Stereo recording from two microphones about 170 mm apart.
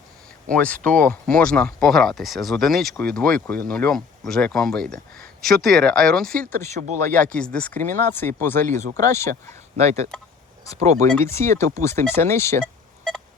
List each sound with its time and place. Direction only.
0.5 s speech: 10° left (ahead or behind)
9.7 s speech: 40° right (ahead or behind)
11.1 s speech: 15° left (ahead or behind)